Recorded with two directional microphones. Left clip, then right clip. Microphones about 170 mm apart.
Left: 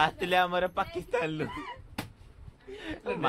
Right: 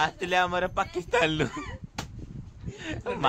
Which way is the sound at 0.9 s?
25° right (ahead or behind).